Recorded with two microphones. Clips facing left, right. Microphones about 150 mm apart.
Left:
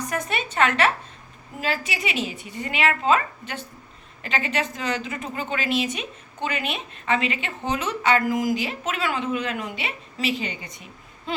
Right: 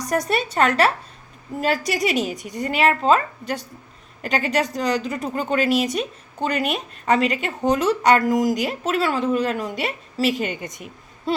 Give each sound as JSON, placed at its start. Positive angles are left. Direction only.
{"t": 0.0, "sound": "a woman's voice", "side_deg": -40}